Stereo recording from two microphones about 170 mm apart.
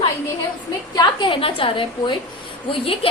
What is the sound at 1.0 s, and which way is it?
A woman's voice, 30° left (ahead or behind).